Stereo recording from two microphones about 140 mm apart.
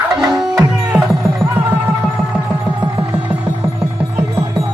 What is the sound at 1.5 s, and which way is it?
Music, 15° right (ahead or behind).